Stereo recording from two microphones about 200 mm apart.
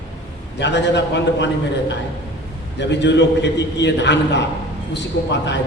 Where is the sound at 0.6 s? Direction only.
60° left (ahead or behind).